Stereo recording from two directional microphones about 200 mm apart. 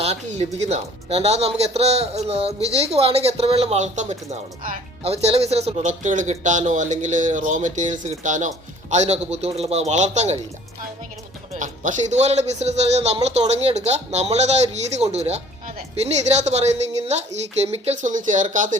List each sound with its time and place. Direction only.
0.0 s speech: 35° right (ahead or behind)
11.5 s speech: 40° right (ahead or behind)
17.7 s speech: 35° right (ahead or behind)